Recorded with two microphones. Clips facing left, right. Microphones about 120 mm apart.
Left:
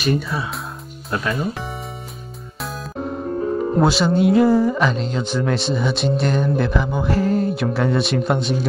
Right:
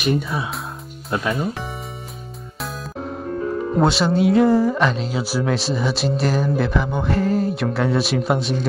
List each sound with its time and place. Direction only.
0.0 s speech: 20° right (ahead or behind)
2.6 s music: centre (ahead or behind)
3.3 s music: 30° left (ahead or behind)
3.7 s speech: centre (ahead or behind)